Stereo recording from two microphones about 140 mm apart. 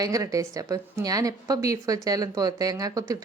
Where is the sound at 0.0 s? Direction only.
25° right (ahead or behind).